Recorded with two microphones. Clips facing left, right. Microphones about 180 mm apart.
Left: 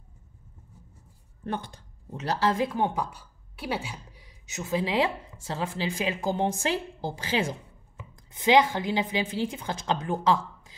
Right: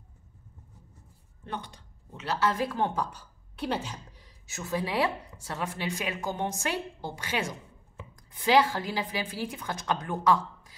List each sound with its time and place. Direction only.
1.4 s speech: 50° left (ahead or behind)
2.5 s a woman's voice: 20° left (ahead or behind)
8.3 s a woman's voice: 20° left (ahead or behind)